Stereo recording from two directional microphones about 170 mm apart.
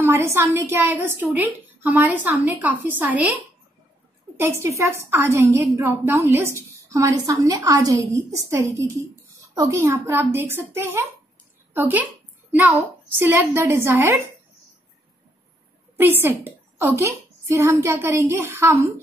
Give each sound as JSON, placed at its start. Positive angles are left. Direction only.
{"t": 0.0, "sound": "a woman's voice", "side_deg": -15}
{"t": 4.4, "sound": "a woman's voice", "side_deg": -15}
{"t": 16.0, "sound": "a woman's voice", "side_deg": -10}